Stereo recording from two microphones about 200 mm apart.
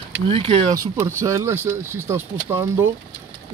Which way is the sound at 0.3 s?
25° right (ahead or behind).